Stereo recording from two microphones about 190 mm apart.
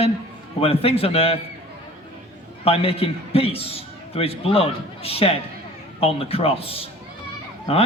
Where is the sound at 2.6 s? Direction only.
30° left (ahead or behind).